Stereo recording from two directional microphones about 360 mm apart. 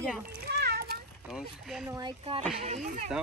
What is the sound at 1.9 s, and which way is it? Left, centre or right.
Speech, centre.